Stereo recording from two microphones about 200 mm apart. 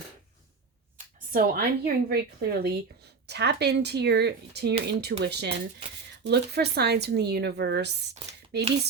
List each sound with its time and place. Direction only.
1.3 s a woman's voice: 45° right (ahead or behind)